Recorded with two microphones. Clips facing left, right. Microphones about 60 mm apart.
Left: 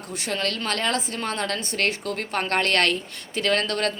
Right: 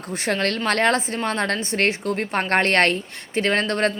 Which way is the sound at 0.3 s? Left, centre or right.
Right.